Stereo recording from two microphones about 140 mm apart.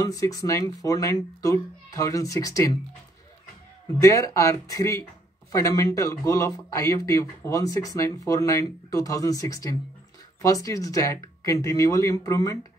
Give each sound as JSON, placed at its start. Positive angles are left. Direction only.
{"t": 0.0, "sound": "a child's voice", "side_deg": 25}
{"t": 3.8, "sound": "a child's voice", "side_deg": 25}